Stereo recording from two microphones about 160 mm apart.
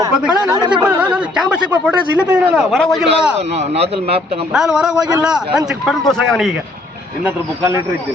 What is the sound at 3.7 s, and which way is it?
Speech, 40° right (ahead or behind).